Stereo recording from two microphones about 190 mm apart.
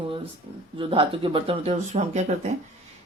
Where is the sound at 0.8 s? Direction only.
30° right (ahead or behind).